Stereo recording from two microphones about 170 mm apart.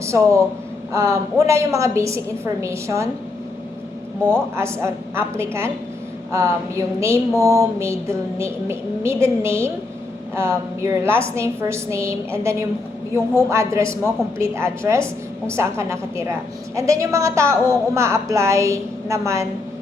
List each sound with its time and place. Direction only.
0.0 s a man's voice: 15° right (ahead or behind)
4.5 s a woman's voice: 15° right (ahead or behind)